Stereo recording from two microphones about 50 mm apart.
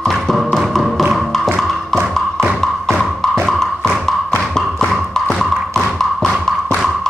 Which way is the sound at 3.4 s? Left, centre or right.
Centre.